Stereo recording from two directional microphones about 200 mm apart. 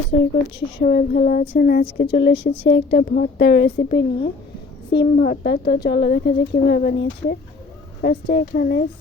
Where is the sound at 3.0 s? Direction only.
45° left (ahead or behind).